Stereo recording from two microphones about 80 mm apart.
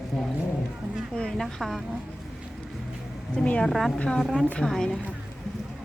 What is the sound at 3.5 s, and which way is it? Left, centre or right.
Speech, centre.